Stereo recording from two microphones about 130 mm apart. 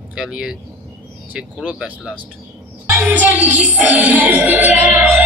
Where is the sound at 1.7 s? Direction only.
10° right (ahead or behind).